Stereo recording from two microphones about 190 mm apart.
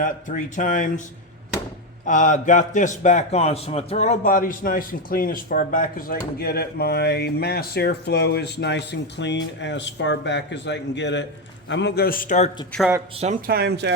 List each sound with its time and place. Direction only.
0.0 s speech: 45° left (ahead or behind)
2.0 s a man's voice: 40° left (ahead or behind)
13.5 s speech: 60° right (ahead or behind)